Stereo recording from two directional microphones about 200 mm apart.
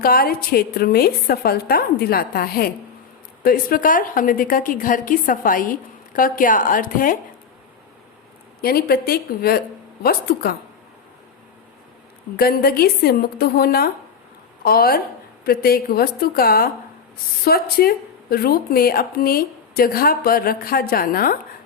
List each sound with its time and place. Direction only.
0.0 s speech: 45° left (ahead or behind)
8.6 s speech: 50° left (ahead or behind)
12.4 s a woman's voice: 50° left (ahead or behind)